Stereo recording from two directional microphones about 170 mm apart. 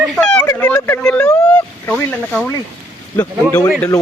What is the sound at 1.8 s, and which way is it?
A man's voice, 5° left (ahead or behind).